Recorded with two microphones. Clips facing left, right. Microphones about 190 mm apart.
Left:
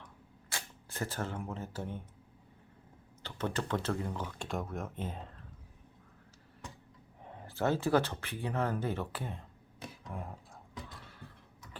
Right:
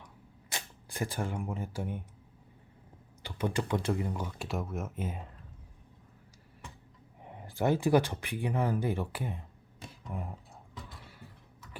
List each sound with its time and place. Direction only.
0.5 s speech: 15° right (ahead or behind)
3.2 s speech: 10° right (ahead or behind)
7.2 s speech: 15° right (ahead or behind)
10.0 s a sound: 5° right (ahead or behind)